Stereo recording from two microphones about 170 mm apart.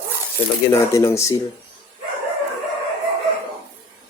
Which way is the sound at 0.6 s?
15° left (ahead or behind).